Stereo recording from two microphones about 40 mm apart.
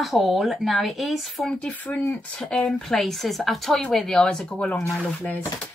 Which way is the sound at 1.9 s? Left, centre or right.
Left.